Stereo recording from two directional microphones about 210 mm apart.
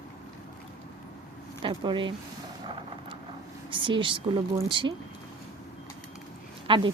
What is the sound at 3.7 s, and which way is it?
Speech, 25° right (ahead or behind).